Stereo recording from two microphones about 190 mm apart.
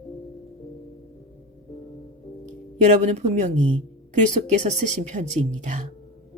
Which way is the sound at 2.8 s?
35° right (ahead or behind).